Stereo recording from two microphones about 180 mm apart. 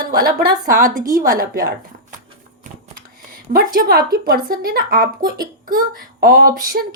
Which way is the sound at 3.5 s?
55° right (ahead or behind).